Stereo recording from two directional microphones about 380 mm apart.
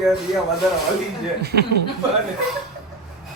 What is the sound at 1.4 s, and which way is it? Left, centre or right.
Speech, right.